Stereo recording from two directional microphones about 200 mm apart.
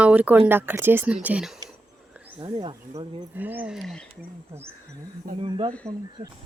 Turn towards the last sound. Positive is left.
turn(degrees=-25)  # may be behind; listen again after turning